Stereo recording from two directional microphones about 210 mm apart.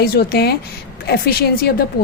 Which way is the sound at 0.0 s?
45° left (ahead or behind).